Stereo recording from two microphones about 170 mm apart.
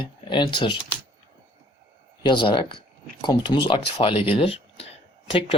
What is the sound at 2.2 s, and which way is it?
Speech, 25° left (ahead or behind).